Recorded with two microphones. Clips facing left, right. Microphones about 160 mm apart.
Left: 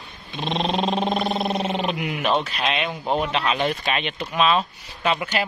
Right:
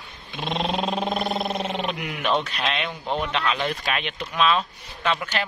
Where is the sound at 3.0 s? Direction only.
35° left (ahead or behind).